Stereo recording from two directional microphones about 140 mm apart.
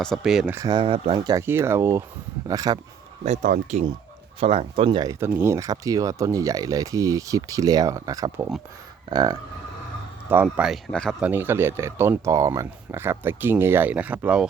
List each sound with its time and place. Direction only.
0.0 s speech: centre (ahead or behind)
0.5 s speech: 30° right (ahead or behind); by 1.2 s 45° right (ahead or behind)
1.3 s speech: 20° right (ahead or behind)
3.2 s speech: 55° right (ahead or behind)
4.4 s speech: 45° right (ahead or behind)
5.2 s speech: 15° right (ahead or behind)
10.4 s speech: 5° right (ahead or behind)
11.2 s speech: 15° right (ahead or behind)